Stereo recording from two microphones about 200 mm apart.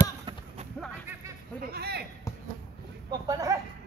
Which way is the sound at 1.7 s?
55° right (ahead or behind).